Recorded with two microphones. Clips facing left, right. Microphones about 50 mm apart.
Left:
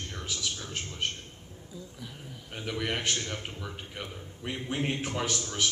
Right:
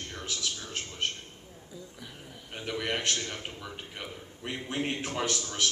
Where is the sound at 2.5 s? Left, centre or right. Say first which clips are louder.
Even; centre.